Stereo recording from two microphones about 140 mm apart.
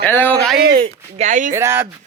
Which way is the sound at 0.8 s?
55° right (ahead or behind).